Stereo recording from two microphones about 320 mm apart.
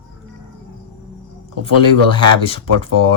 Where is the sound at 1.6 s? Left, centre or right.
Centre.